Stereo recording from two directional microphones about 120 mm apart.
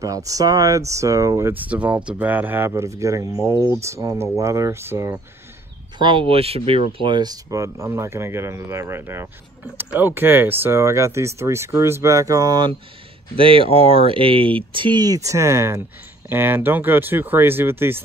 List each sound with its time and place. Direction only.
0.0 s speech: 30° right (ahead or behind)
5.9 s speech: 45° right (ahead or behind)
6.9 s speech: 45° right (ahead or behind)
13.4 s speech: 50° right (ahead or behind); by 18.0 s 20° right (ahead or behind)